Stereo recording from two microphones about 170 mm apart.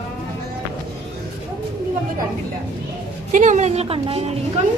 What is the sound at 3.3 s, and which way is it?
Speech, 45° right (ahead or behind).